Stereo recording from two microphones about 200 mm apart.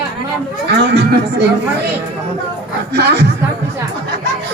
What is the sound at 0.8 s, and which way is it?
Speech, 60° right (ahead or behind).